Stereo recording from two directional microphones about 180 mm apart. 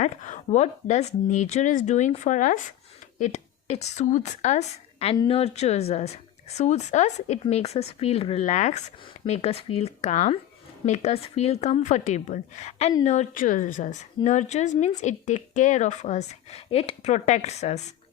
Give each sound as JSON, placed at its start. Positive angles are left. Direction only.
{"t": 0.0, "sound": "a woman's voice", "side_deg": 40}